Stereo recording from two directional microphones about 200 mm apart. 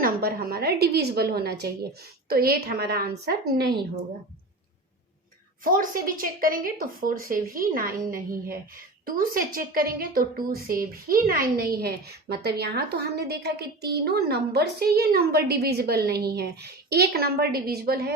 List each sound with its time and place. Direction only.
0.0 s a woman's voice: 50° right (ahead or behind)
5.6 s a woman's voice: 45° right (ahead or behind)